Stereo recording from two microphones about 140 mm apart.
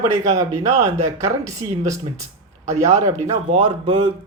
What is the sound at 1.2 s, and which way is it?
Speech, 20° right (ahead or behind).